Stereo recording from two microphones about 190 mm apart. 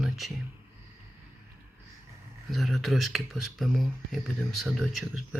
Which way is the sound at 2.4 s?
Centre (ahead or behind).